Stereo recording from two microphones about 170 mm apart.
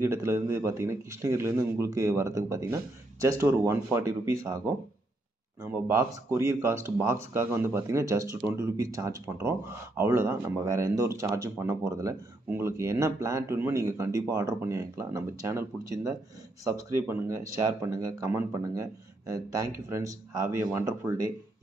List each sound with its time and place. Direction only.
0.0 s speech: 15° right (ahead or behind)
5.6 s speech: 15° right (ahead or behind)